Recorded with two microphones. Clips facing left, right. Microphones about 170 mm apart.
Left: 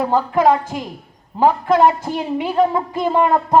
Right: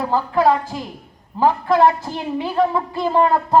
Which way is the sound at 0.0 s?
20° left (ahead or behind).